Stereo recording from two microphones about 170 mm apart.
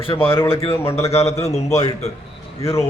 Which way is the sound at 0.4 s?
35° left (ahead or behind).